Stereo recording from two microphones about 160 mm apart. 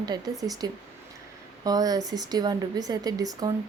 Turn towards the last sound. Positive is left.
turn(degrees=-25)  # may be behind; listen again after turning